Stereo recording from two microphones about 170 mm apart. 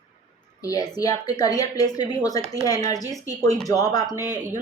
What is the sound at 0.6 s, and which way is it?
A woman's voice, 20° left (ahead or behind).